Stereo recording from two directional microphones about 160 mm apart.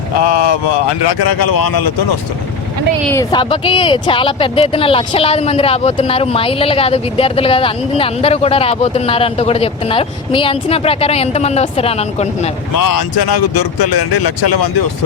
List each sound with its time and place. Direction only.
3.3 s speech: 35° left (ahead or behind)